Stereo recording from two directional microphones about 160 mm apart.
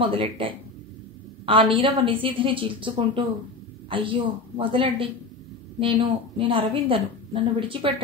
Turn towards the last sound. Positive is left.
turn(degrees=-35)  # may be behind; listen again after turning